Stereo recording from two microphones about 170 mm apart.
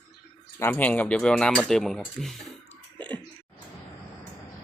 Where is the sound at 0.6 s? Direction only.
10° left (ahead or behind).